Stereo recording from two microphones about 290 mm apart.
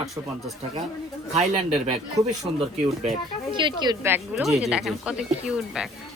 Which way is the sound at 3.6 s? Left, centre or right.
Centre.